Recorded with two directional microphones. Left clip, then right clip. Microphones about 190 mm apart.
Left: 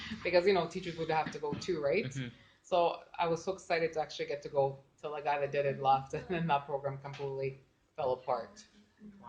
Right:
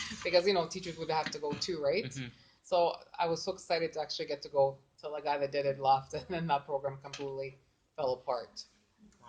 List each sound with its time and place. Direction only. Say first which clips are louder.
0.3 s speech: even; 40° right (ahead or behind)